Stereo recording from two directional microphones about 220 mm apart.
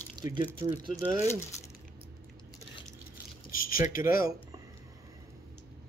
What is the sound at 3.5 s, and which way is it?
Speech, 40° left (ahead or behind).